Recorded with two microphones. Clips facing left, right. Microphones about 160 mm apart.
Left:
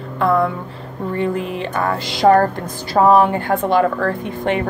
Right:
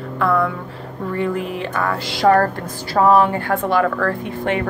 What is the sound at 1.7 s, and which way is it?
Speech, 30° left (ahead or behind).